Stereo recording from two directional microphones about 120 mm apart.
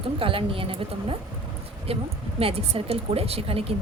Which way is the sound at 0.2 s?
50° right (ahead or behind).